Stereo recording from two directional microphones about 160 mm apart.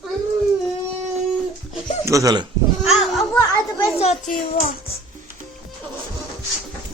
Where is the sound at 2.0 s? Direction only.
20° right (ahead or behind).